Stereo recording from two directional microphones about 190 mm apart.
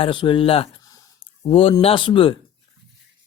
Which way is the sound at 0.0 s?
25° left (ahead or behind).